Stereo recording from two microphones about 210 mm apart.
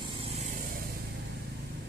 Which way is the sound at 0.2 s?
35° right (ahead or behind).